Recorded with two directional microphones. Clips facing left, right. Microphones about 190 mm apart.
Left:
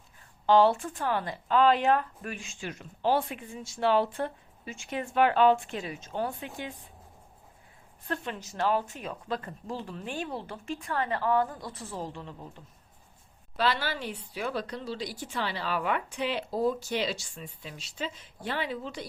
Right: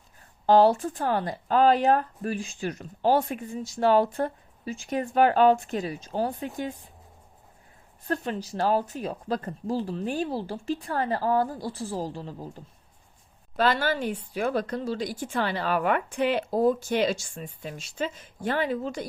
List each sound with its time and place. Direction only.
0.4 s speech: 40° right (ahead or behind)
8.0 s speech: 40° right (ahead or behind)
13.6 s a woman's voice: 50° right (ahead or behind)